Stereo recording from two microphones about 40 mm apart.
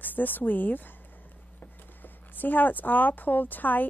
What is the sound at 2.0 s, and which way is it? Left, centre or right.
A woman's voice, left.